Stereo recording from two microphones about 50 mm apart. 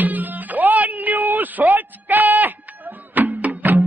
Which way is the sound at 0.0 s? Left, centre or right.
Right.